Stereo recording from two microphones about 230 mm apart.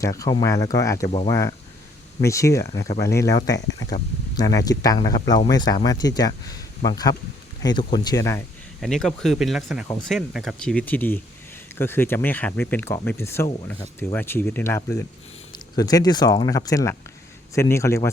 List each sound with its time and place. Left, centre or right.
0.0 s speech: centre
8.8 s speech: centre